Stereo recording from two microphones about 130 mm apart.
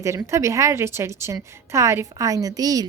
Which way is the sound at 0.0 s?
25° right (ahead or behind).